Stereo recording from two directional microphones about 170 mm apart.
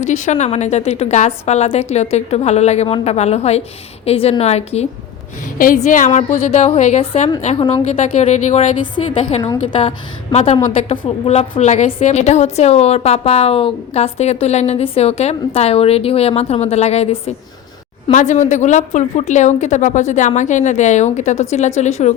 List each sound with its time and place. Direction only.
0.0 s a woman's voice: 45° left (ahead or behind)
5.5 s a woman's voice: 50° left (ahead or behind); by 7.9 s 30° left (ahead or behind)
7.9 s a woman's voice: 40° left (ahead or behind)